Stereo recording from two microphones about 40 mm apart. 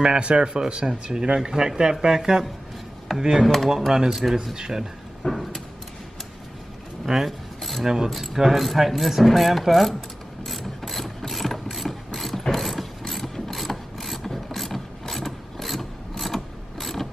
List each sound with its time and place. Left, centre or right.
0.0 s speech: right
3.4 s speech: centre
3.7 s speech: centre
5.2 s vehicle: centre
7.2 s keys jangling: centre
7.8 s speech: centre
10.4 s ratchet: centre